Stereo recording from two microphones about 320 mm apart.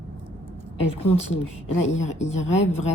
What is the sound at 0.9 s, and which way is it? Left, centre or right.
Speech, centre.